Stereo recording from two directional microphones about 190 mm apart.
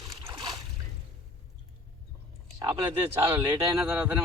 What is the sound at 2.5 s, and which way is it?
Speech, 15° right (ahead or behind).